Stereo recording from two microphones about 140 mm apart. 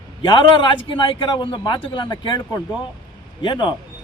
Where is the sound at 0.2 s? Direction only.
35° left (ahead or behind).